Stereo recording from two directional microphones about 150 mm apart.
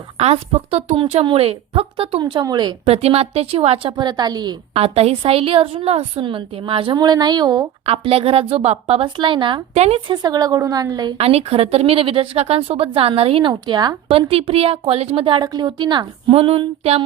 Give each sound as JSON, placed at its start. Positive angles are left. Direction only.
{"t": 0.2, "sound": "a woman's voice", "side_deg": -40}
{"t": 2.8, "sound": "a woman's voice", "side_deg": -40}
{"t": 3.9, "sound": "a woman's voice", "side_deg": -30}
{"t": 4.7, "sound": "a woman's voice", "side_deg": -40}
{"t": 7.9, "sound": "a woman's voice", "side_deg": -40}
{"t": 9.7, "sound": "a woman's voice", "side_deg": -45}
{"t": 10.1, "sound": "a woman's voice", "side_deg": -25}
{"t": 11.2, "sound": "a woman's voice", "side_deg": -40}
{"t": 13.5, "sound": "a woman's voice", "side_deg": -30}